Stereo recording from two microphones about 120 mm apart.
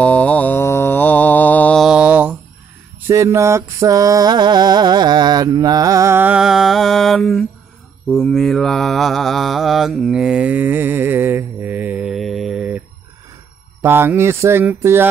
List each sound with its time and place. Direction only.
0.0 s mantra: 10° left (ahead or behind)
1.8 s mantra: 5° right (ahead or behind)
3.1 s music: 25° right (ahead or behind)
6.4 s mantra: 5° right (ahead or behind)
12.1 s mantra: centre (ahead or behind); by 15.0 s 20° right (ahead or behind)